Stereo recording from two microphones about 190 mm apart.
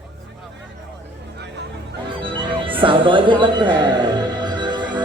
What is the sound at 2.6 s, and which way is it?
Music, 25° right (ahead or behind).